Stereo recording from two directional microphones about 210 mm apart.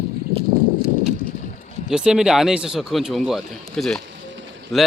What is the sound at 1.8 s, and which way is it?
Speech, 5° right (ahead or behind).